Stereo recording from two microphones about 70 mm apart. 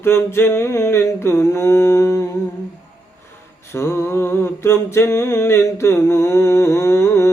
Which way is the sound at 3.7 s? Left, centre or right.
Left.